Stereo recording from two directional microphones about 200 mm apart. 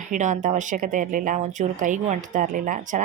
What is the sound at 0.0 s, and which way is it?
A woman's voice, 40° right (ahead or behind).